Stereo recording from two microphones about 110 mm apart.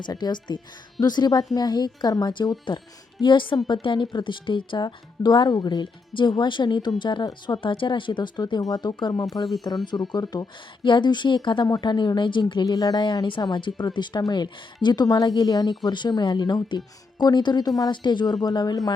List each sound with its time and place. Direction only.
0.0 s speech: 40° left (ahead or behind)